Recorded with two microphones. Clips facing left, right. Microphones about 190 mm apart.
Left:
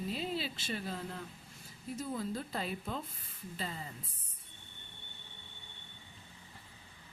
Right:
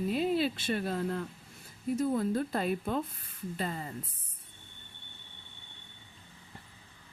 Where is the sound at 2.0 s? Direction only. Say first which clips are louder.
Right 8 dB; 55° right (ahead or behind).